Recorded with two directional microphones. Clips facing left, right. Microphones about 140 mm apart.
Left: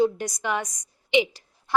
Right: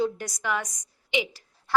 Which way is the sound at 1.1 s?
20° left (ahead or behind).